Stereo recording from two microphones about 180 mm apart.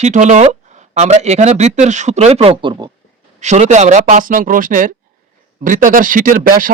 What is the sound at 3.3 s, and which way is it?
Speech, 40° right (ahead or behind).